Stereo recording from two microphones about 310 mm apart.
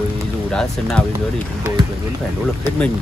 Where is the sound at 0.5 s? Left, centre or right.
Centre.